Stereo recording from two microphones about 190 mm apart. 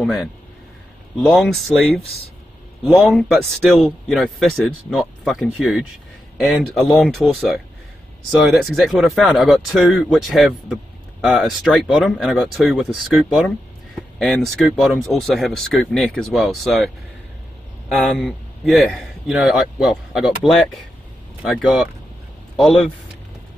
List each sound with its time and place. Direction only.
0.0 s speech: centre (ahead or behind)
17.9 s speech: 5° left (ahead or behind)